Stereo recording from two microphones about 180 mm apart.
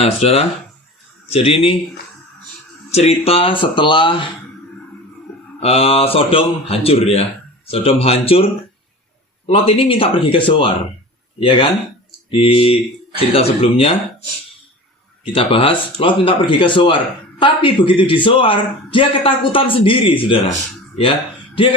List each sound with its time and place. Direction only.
0.0 s speech: 35° left (ahead or behind)
2.9 s a man's voice: 35° left (ahead or behind)
5.5 s speech: 35° left (ahead or behind)
9.5 s a man's voice: 30° left (ahead or behind)
15.2 s a man's voice: 30° left (ahead or behind)